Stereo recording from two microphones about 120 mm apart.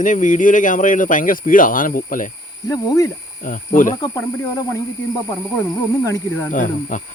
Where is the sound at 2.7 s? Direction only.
30° left (ahead or behind).